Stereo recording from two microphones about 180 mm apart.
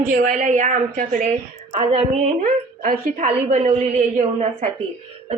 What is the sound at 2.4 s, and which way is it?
A woman's voice, 45° right (ahead or behind).